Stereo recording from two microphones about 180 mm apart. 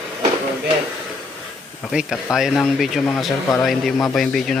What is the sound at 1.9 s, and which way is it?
Speech, 5° right (ahead or behind).